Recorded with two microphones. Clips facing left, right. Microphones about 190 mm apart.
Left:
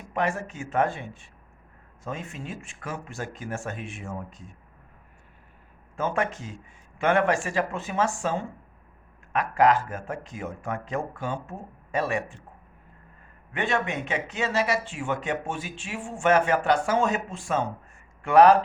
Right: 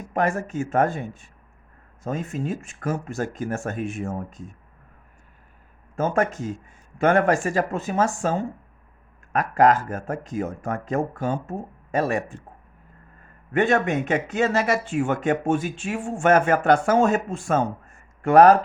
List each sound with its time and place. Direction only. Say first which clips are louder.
0.1 s speech: right 4 dB; 45° right (ahead or behind)
6.0 s speech: right 5 dB; 45° right (ahead or behind)
13.5 s speech: right 7 dB; 45° right (ahead or behind)